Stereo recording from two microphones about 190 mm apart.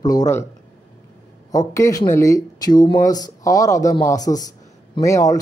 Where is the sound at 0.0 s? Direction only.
20° left (ahead or behind).